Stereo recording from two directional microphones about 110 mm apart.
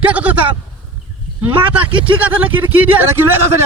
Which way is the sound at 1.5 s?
50° right (ahead or behind).